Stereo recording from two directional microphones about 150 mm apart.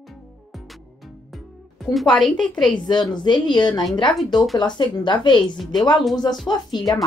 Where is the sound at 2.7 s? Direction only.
30° left (ahead or behind).